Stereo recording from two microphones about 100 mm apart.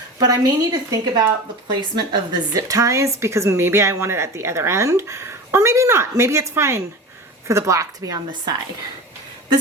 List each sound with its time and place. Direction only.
0.2 s a woman's voice: 40° right (ahead or behind)
1.6 s a woman's voice: 50° right (ahead or behind)